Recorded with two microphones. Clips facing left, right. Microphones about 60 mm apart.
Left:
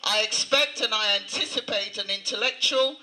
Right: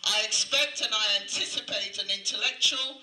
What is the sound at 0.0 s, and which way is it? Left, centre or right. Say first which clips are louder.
A man's voice: left 4 dB; left.